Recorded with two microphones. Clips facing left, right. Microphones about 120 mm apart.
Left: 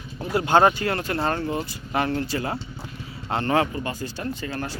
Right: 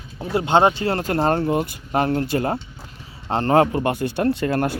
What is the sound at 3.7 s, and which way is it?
Speech, 65° right (ahead or behind).